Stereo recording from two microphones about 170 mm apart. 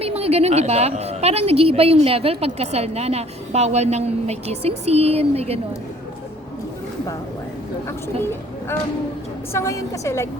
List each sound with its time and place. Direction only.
0.0 s a woman's voice: 35° right (ahead or behind)
7.9 s speech: 15° left (ahead or behind)
9.5 s a woman's voice: 15° left (ahead or behind)